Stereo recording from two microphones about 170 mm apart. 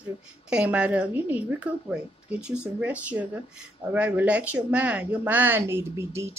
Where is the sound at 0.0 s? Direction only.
5° right (ahead or behind).